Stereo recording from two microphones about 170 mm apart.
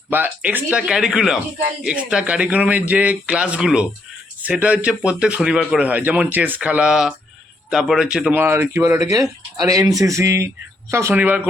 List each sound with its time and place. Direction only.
0.1 s speech: 10° right (ahead or behind)